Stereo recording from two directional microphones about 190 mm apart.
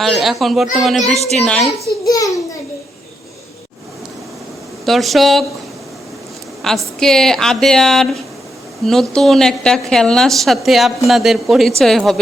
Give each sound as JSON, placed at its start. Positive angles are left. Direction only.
{"t": 0.0, "sound": "a woman's voice", "side_deg": 0}
{"t": 2.0, "sound": "a child's voice", "side_deg": 20}
{"t": 4.9, "sound": "a woman's voice", "side_deg": 0}
{"t": 6.6, "sound": "a woman's voice", "side_deg": 0}